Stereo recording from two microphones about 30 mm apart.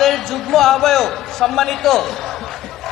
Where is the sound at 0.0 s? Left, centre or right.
Centre.